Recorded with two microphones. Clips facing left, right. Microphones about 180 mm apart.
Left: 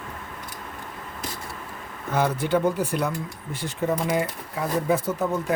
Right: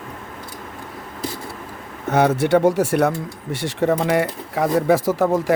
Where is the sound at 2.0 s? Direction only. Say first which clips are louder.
Right 7 dB; 75° right (ahead or behind).